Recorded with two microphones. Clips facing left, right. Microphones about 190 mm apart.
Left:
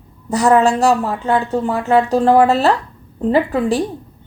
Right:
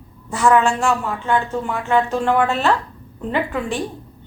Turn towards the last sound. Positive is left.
turn(degrees=35)  # may be behind; listen again after turning